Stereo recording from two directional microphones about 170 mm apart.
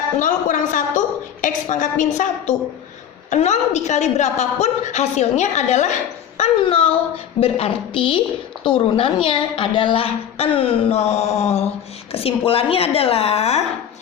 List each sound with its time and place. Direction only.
0.2 s a woman's voice: 50° left (ahead or behind)